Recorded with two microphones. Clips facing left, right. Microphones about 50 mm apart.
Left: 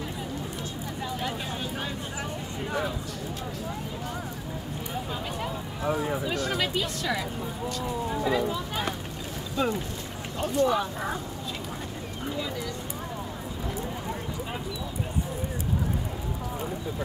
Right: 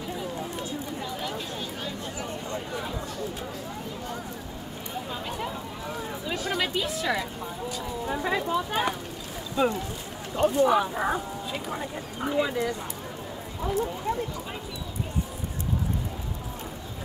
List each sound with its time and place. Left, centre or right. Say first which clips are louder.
5.4 s a sound: left 2 dB; centre
6.5 s speech: right 1 dB; centre
8.1 s speech: right 1 dB; centre
9.6 s speech: right 3 dB; centre
12.3 s speech: right 7 dB; right